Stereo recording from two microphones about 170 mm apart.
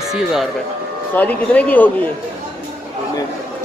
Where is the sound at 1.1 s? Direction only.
10° left (ahead or behind).